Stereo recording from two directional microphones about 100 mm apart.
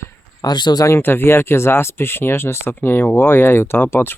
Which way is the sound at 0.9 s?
25° left (ahead or behind).